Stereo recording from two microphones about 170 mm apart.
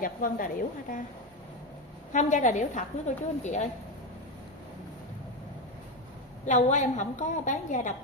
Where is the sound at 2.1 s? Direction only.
45° left (ahead or behind).